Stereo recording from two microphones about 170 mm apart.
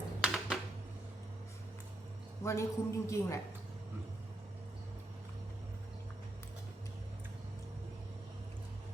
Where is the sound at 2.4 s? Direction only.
15° left (ahead or behind).